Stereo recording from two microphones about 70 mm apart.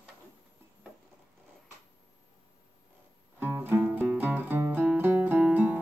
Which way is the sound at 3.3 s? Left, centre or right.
Right.